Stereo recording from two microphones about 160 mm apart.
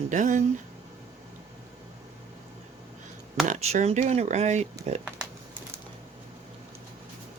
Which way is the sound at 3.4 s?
45° right (ahead or behind).